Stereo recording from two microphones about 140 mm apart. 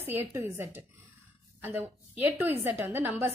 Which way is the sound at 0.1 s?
15° right (ahead or behind).